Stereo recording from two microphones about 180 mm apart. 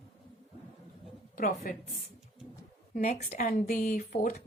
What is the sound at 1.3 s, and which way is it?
Speech, 50° left (ahead or behind).